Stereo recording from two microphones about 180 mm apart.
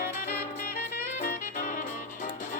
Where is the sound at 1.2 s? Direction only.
50° left (ahead or behind).